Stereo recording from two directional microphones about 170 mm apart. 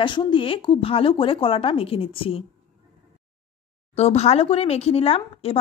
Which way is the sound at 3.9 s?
40° left (ahead or behind).